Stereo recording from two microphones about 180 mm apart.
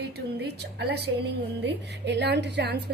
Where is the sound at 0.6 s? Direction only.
65° right (ahead or behind).